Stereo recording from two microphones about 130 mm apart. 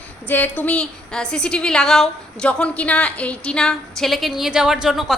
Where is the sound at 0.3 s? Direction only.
15° left (ahead or behind).